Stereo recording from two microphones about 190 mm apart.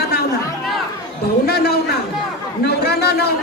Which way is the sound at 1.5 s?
55° left (ahead or behind).